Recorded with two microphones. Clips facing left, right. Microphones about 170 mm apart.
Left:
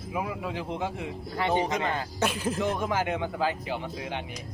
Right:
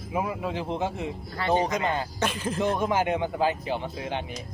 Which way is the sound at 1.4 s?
15° left (ahead or behind).